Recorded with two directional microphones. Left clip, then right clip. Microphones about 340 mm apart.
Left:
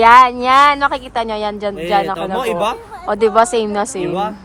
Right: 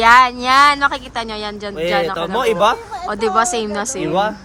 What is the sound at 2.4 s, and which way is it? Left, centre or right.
Speech, centre.